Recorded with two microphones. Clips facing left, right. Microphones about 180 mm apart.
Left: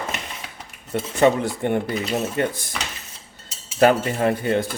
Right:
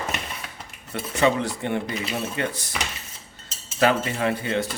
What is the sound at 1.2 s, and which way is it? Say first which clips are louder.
Speech: left 4 dB; 50° left (ahead or behind).